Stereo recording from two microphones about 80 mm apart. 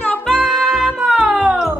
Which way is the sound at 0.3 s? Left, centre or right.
Centre.